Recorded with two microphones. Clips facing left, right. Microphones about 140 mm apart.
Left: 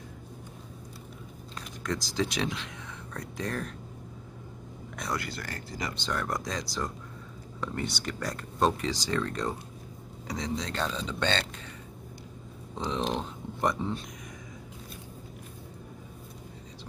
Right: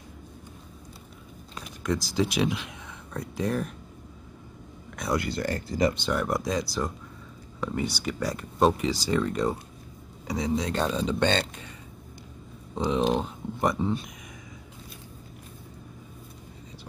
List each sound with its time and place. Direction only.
1.5 s speech: 10° right (ahead or behind)
5.1 s speech: 25° right (ahead or behind)
5.9 s speech: 10° right (ahead or behind)
12.7 s speech: 5° right (ahead or behind)